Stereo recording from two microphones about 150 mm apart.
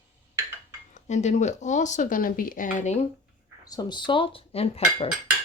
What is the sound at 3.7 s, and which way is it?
Speech, 30° left (ahead or behind).